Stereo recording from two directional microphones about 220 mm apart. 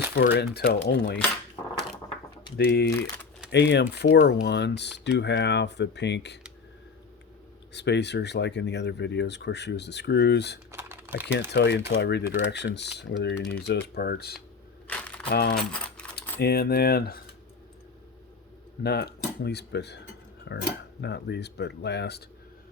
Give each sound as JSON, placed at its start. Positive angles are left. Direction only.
{"t": 0.1, "sound": "speech", "side_deg": 45}
{"t": 2.6, "sound": "speech", "side_deg": 45}
{"t": 7.7, "sound": "speech", "side_deg": 50}
{"t": 10.7, "sound": "typing", "side_deg": -10}
{"t": 11.5, "sound": "speech", "side_deg": 50}
{"t": 14.8, "sound": "a sound", "side_deg": 5}
{"t": 15.3, "sound": "speech", "side_deg": 45}
{"t": 18.8, "sound": "speech", "side_deg": 50}